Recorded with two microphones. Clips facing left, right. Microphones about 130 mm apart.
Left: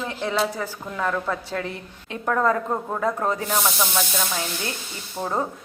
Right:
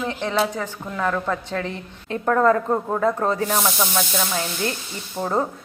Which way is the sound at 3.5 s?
5° right (ahead or behind).